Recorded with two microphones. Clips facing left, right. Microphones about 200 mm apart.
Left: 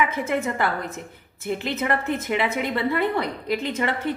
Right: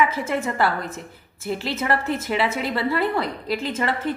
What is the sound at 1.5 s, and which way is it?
A woman's voice, 20° left (ahead or behind).